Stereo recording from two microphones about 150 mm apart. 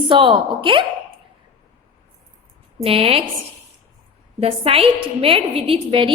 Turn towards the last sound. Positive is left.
turn(degrees=-35)  # may be behind; listen again after turning